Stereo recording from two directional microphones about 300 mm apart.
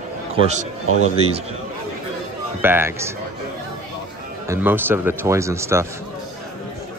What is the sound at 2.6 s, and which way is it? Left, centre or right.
Speech, centre.